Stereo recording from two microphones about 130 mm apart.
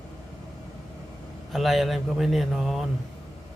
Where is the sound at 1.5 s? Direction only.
Centre (ahead or behind).